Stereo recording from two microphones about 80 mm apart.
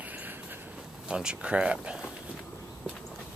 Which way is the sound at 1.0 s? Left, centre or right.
Centre.